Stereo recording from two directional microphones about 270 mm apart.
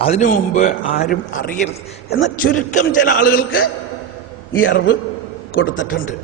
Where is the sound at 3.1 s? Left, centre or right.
Left.